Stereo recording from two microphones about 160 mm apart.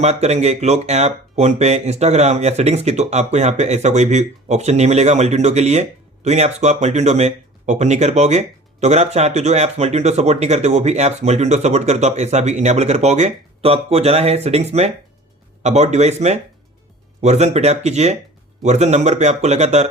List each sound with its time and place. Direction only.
0.0 s speech: 45° right (ahead or behind)